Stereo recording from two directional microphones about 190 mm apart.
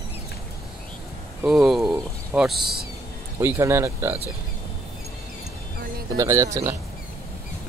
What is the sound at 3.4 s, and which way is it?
Speech, 10° right (ahead or behind).